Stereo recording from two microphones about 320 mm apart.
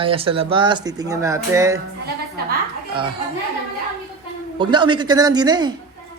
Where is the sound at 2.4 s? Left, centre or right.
Right.